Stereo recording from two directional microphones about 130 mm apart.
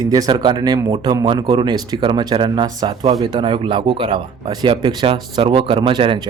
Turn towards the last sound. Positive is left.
turn(degrees=-40)  # may be behind; listen again after turning